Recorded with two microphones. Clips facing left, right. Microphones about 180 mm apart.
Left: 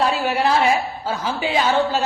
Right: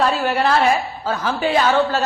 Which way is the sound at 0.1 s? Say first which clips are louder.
Right 1 dB; 10° left (ahead or behind).